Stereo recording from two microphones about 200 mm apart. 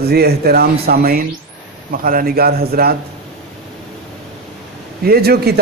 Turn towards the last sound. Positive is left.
turn(degrees=-50)  # may be behind; listen again after turning